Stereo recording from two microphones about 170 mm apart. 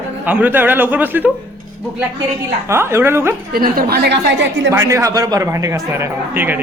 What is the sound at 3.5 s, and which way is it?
A woman's voice, 60° right (ahead or behind).